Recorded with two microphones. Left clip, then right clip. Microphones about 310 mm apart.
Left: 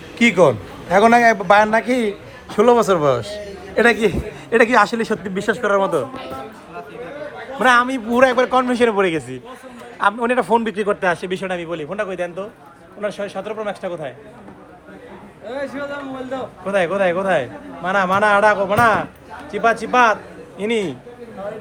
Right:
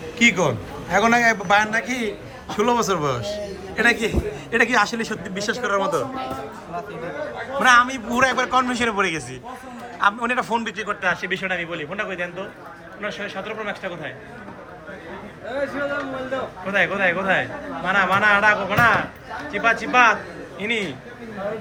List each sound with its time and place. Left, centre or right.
0.2 s a man's voice: centre
7.6 s a man's voice: centre
16.6 s a man's voice: centre